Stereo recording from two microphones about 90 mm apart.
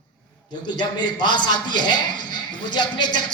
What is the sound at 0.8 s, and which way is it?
A man's voice, 55° left (ahead or behind).